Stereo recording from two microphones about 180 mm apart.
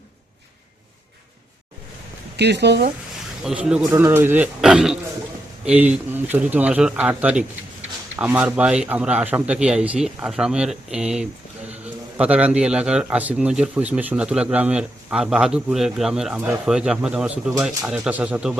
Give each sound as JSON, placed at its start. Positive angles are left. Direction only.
{"t": 2.3, "sound": "speech", "side_deg": -70}
{"t": 3.4, "sound": "a man's voice", "side_deg": -5}